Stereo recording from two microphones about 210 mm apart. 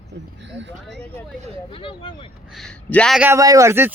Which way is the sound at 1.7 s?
25° left (ahead or behind).